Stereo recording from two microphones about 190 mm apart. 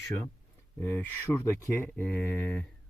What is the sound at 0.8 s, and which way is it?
Speech, 10° left (ahead or behind).